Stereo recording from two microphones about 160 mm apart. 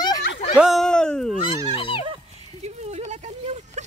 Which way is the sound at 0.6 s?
Centre (ahead or behind).